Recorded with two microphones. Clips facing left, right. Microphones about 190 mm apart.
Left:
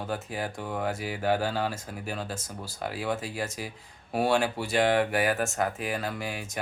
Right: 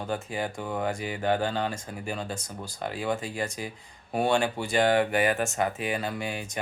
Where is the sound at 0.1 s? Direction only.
Centre (ahead or behind).